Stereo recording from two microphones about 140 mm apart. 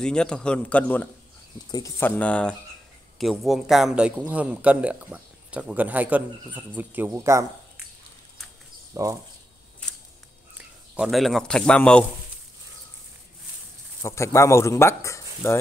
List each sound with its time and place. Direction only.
0.0 s a man's voice: 5° left (ahead or behind); by 7.4 s 20° right (ahead or behind)
8.9 s speech: 20° right (ahead or behind)
11.0 s a man's voice: centre (ahead or behind)
14.0 s speech: 20° left (ahead or behind)